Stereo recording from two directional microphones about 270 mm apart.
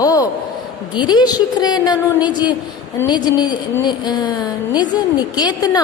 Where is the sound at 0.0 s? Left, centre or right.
Centre.